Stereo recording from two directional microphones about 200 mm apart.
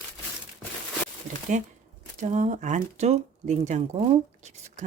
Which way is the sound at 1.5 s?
40° right (ahead or behind).